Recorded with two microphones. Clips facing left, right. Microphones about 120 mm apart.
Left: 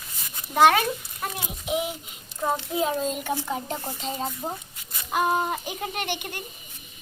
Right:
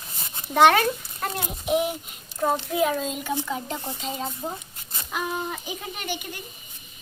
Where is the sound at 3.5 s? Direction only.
40° left (ahead or behind); by 6.4 s 60° left (ahead or behind).